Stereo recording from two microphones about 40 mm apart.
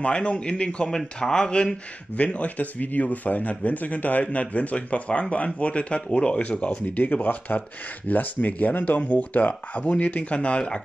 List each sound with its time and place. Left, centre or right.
0.0 s speech: left
0.8 s speech: centre
2.1 s a man's voice: left
7.2 s a man's voice: left